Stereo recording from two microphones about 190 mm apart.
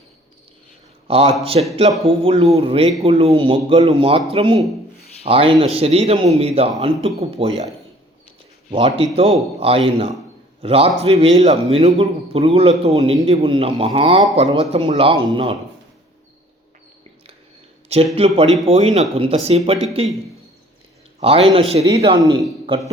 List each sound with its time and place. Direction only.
1.0 s a man's voice: 30° right (ahead or behind)
8.7 s a man's voice: 30° right (ahead or behind)
17.8 s a man's voice: 30° right (ahead or behind)
21.2 s a man's voice: 30° right (ahead or behind)
21.8 s speech: 20° right (ahead or behind)